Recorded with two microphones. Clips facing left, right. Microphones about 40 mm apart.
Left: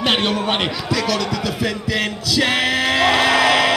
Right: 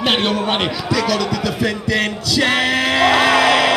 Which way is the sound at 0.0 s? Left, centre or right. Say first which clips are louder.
Right 1 dB; centre.